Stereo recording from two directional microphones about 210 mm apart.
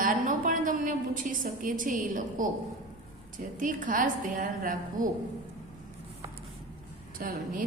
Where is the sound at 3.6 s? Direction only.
40° right (ahead or behind).